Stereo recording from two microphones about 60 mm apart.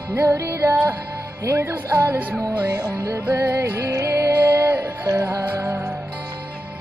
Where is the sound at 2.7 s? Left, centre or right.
Right.